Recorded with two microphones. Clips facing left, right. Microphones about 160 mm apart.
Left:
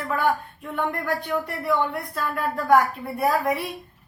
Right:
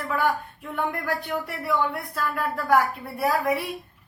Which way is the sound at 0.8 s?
10° right (ahead or behind).